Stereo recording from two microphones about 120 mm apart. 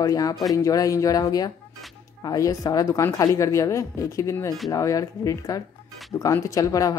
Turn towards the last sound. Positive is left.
turn(degrees=30)  # may be behind; listen again after turning